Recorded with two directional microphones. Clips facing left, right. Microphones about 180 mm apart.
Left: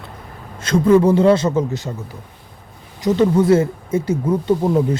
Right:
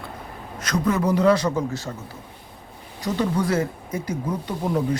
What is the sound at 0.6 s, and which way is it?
Speech, 25° left (ahead or behind).